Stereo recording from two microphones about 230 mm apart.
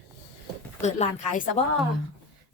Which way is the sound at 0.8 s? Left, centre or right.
Left.